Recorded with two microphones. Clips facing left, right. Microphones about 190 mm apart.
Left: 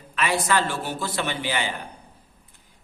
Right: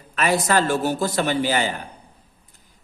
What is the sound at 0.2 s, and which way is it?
A man's voice, 40° right (ahead or behind).